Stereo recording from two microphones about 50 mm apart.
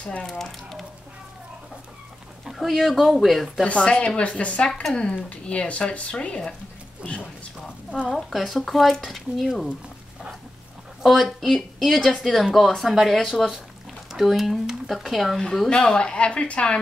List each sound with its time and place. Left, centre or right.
0.0 s speech: left
0.3 s speech: centre
2.4 s speech: centre
3.6 s speech: left
5.1 s speech: left
8.1 s speech: centre
11.0 s speech: centre
15.7 s speech: centre